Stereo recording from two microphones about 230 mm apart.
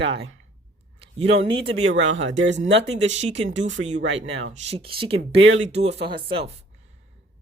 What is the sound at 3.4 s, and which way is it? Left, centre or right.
Speech, right.